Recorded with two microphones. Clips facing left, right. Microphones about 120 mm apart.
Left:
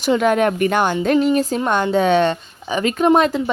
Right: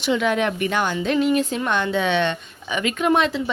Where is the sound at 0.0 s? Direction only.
45° left (ahead or behind).